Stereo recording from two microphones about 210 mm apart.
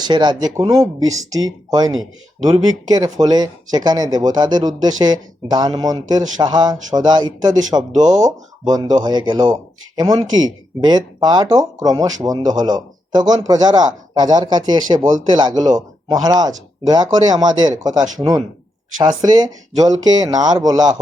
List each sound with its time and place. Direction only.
0.0 s a man's voice: 20° right (ahead or behind)